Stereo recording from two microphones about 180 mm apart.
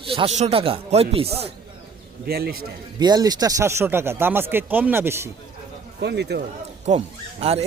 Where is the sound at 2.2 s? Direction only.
60° right (ahead or behind).